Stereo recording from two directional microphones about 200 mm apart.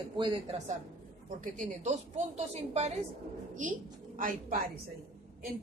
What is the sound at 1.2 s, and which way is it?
A woman's voice, 40° right (ahead or behind).